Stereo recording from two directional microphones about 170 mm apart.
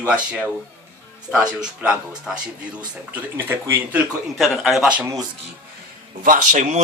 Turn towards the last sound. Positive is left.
turn(degrees=-50)  # may be behind; listen again after turning